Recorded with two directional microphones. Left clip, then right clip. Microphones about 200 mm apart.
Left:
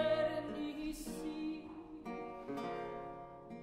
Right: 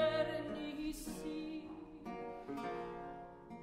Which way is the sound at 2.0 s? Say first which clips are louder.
Left 1 dB; 35° left (ahead or behind).